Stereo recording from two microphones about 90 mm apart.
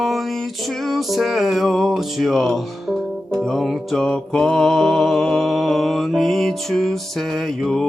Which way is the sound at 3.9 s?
10° left (ahead or behind).